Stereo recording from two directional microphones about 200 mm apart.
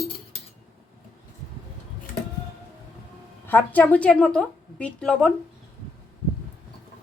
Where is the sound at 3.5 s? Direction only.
10° left (ahead or behind).